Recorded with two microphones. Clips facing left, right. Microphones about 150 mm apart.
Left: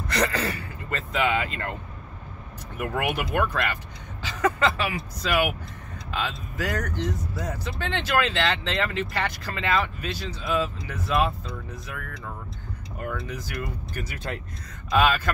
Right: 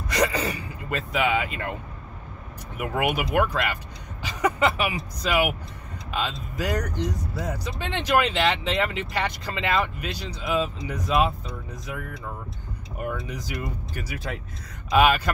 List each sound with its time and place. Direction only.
0.1 s speech: 10° right (ahead or behind)
2.8 s speech: 15° right (ahead or behind)